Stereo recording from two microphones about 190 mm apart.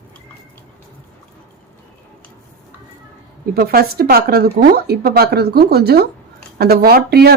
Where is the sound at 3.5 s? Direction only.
55° right (ahead or behind).